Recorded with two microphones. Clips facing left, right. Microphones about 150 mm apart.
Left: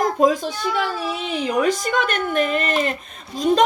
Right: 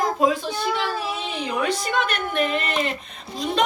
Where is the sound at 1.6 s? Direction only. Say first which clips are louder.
Left 3 dB; 45° left (ahead or behind).